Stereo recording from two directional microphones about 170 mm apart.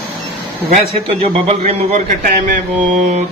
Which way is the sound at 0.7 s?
40° right (ahead or behind).